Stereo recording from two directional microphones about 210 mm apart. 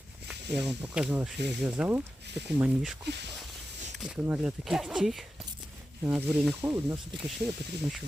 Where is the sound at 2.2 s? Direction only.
55° right (ahead or behind).